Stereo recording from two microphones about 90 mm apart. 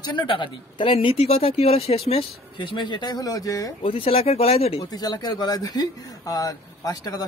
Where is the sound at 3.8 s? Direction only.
85° left.